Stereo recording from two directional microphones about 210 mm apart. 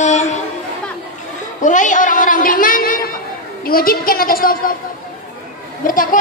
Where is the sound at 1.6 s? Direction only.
35° left (ahead or behind).